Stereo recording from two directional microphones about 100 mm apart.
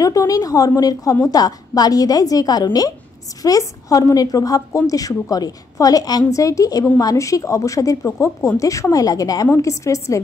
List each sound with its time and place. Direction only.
0.0 s a woman's voice: 35° left (ahead or behind)